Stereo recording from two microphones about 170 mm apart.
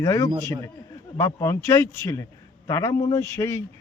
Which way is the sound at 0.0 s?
15° left (ahead or behind).